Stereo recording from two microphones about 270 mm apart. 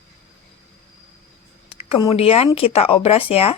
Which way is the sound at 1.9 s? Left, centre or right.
Left.